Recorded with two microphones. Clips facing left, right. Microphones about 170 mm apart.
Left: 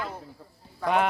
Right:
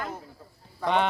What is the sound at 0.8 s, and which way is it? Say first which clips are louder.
Speech: left 1 dB; 5° left (ahead or behind).